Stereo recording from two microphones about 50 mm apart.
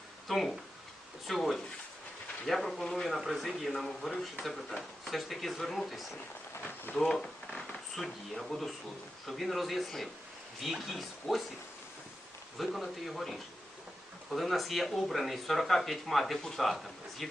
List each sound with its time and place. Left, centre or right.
0.3 s speech: centre
6.6 s speech: left
7.2 s speech: centre
12.5 s speech: centre